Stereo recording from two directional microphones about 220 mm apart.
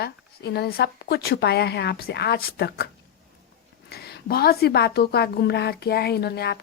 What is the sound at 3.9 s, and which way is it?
A woman's voice, 45° left (ahead or behind).